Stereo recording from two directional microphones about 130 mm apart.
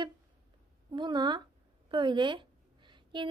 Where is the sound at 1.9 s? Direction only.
40° right (ahead or behind).